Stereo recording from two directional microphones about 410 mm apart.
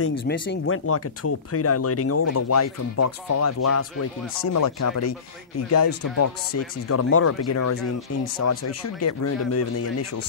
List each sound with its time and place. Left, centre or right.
0.3 s speech: left